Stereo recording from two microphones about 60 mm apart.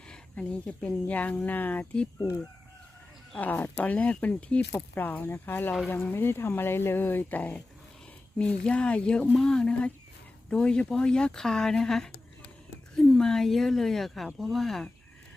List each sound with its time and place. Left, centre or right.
0.1 s speech: centre
3.3 s speech: left; by 14.8 s centre